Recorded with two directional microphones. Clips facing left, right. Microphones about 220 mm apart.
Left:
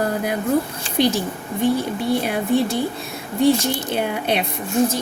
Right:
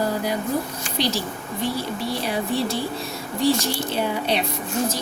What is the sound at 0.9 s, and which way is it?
Speech, 55° left (ahead or behind).